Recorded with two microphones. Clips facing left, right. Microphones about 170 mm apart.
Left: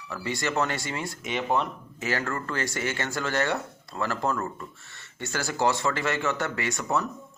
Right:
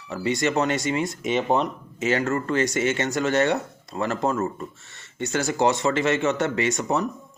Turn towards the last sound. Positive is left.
turn(degrees=-20)  # may be behind; listen again after turning